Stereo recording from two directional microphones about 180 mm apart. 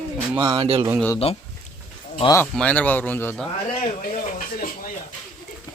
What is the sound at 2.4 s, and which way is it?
Speech, 5° left (ahead or behind).